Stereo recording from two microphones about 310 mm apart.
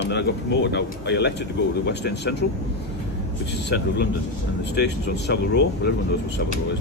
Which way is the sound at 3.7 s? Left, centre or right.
Left.